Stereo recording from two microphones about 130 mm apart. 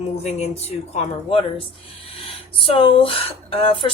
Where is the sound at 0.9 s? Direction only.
45° left (ahead or behind).